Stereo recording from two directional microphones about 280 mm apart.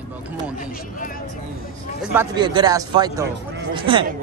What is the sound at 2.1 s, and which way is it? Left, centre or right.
A man's voice, centre.